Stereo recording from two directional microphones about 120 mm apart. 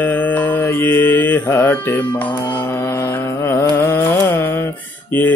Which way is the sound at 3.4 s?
20° left (ahead or behind).